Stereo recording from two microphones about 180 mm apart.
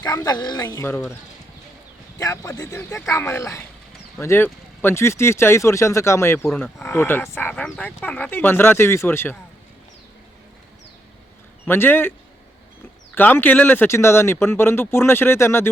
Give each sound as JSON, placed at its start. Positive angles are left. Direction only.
{"t": 0.0, "sound": "speech", "side_deg": 20}
{"t": 2.1, "sound": "speech", "side_deg": 20}
{"t": 11.6, "sound": "speech", "side_deg": 10}
{"t": 13.1, "sound": "speech", "side_deg": 10}